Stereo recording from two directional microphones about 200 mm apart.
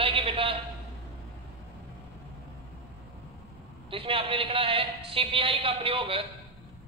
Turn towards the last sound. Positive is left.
turn(degrees=-25)  # may be behind; listen again after turning